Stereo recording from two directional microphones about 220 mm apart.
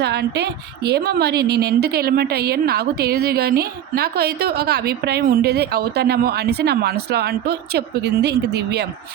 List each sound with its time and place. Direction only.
0.0 s a woman's voice: 50° right (ahead or behind)